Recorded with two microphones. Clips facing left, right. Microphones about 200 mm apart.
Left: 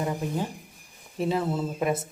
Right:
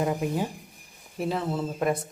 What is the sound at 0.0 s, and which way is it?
Speech, 20° right (ahead or behind).